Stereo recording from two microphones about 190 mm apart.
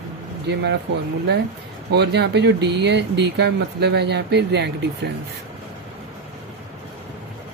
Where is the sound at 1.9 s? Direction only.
60° right (ahead or behind).